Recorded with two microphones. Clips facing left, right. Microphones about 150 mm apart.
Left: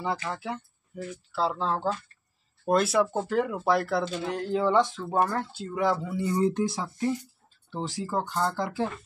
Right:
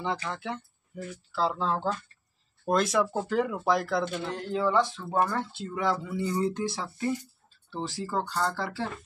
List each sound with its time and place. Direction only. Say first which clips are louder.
0.0 s speech: left 1 dB; 5° left (ahead or behind)
4.5 s speech: left 2 dB; 20° left (ahead or behind)
5.1 s speech: left 1 dB; 5° left (ahead or behind)